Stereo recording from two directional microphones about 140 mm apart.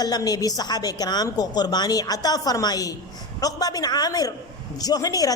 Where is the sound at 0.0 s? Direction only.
30° left (ahead or behind).